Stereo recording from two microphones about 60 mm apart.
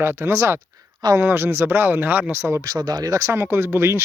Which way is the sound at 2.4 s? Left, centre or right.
Right.